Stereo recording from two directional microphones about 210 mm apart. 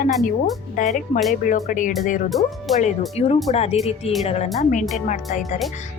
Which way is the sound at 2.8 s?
30° left (ahead or behind).